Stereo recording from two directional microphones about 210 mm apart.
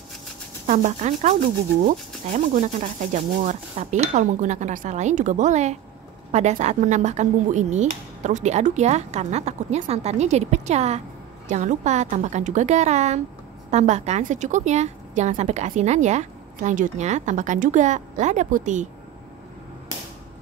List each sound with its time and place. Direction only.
0.7 s a woman's voice: 35° right (ahead or behind)